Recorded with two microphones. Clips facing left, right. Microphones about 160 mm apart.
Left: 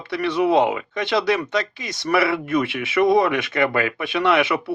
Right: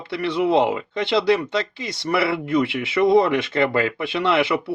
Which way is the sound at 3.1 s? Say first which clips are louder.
Right 2 dB; 25° right (ahead or behind).